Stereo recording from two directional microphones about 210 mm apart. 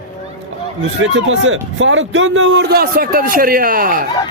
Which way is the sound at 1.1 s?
65° right (ahead or behind).